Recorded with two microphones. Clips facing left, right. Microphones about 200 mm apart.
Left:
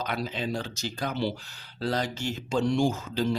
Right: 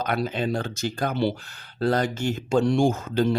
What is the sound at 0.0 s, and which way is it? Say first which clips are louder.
Speech: right 5 dB; 55° right (ahead or behind).